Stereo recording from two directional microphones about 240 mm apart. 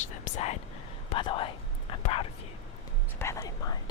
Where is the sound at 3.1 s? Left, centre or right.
Centre.